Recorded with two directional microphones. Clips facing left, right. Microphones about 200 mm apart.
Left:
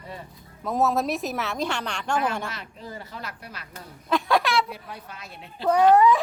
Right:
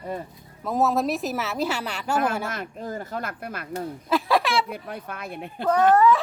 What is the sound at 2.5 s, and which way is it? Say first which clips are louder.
Speech: right 7 dB; 50° right (ahead or behind).